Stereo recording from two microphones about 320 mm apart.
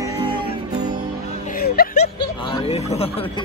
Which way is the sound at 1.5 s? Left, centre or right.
Left.